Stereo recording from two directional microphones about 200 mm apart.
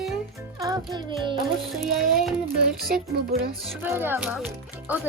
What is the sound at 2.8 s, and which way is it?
Music, 50° right (ahead or behind).